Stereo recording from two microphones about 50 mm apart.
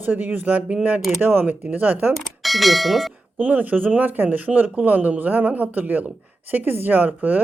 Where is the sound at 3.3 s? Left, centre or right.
Right.